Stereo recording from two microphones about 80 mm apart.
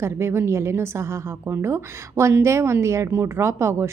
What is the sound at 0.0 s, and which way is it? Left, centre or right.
A woman's voice, right.